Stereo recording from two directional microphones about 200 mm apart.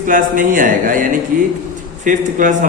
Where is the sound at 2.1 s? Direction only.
40° right (ahead or behind).